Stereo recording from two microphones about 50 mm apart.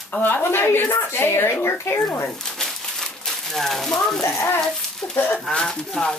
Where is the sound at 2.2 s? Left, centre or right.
Centre.